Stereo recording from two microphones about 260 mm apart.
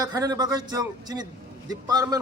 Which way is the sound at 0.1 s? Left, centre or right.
Centre.